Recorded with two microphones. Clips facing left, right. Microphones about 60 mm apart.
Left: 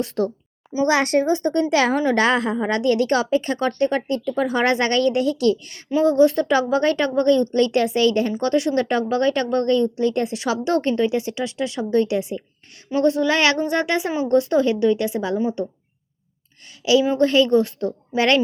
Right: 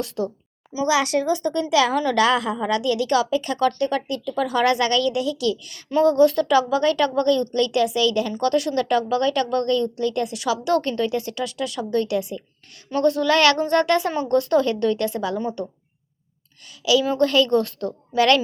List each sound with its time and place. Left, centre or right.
0.2 s a woman's voice: left
6.1 s a woman's voice: left
16.6 s a sound: left
17.1 s a woman's voice: left